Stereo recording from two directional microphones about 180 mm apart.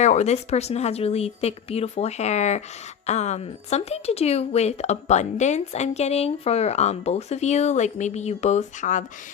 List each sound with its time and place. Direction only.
0.0 s a woman's voice: 40° left (ahead or behind)